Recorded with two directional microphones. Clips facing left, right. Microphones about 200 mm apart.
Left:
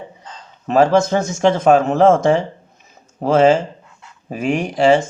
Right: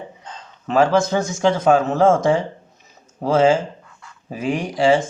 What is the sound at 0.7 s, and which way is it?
A man's voice, 45° left (ahead or behind).